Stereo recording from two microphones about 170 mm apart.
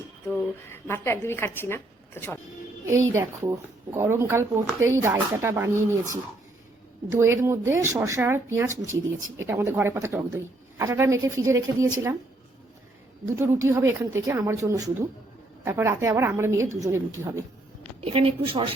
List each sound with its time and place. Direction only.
0.7 s a woman's voice: 15° left (ahead or behind)
2.8 s speech: 15° right (ahead or behind)
13.3 s speech: 15° right (ahead or behind)
18.0 s a woman's voice: 35° right (ahead or behind)